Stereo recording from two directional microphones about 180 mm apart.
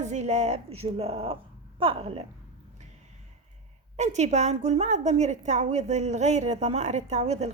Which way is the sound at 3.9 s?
40° right (ahead or behind).